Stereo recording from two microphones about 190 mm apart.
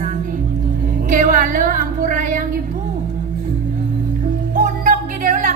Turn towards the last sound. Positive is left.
turn(degrees=-45)  # may be behind; listen again after turning